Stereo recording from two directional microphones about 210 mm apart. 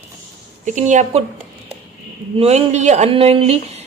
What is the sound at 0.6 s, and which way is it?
Speech, 35° right (ahead or behind).